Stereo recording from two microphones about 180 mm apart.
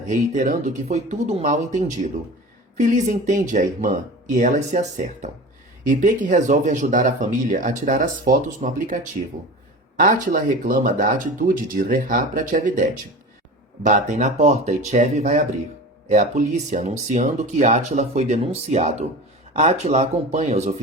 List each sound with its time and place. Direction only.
0.1 s speech: 45° right (ahead or behind)
13.8 s speech: 40° right (ahead or behind)